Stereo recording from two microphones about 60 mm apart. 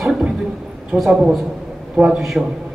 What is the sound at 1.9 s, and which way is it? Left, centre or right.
Speech, centre.